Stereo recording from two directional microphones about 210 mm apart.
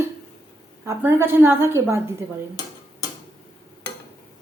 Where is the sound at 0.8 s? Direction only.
10° right (ahead or behind).